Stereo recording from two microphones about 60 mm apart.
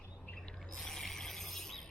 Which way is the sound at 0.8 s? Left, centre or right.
Centre.